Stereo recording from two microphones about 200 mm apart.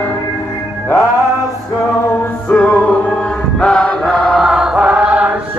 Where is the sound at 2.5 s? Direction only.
5° left (ahead or behind).